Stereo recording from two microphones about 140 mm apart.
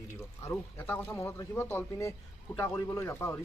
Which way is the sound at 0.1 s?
20° left (ahead or behind).